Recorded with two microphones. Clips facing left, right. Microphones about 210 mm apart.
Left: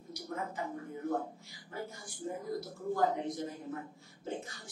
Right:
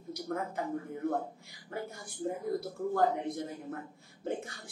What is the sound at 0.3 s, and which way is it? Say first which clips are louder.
Speech: right 4 dB; 60° right (ahead or behind).